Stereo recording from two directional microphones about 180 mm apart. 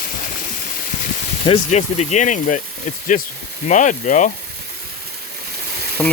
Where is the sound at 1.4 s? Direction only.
35° left (ahead or behind).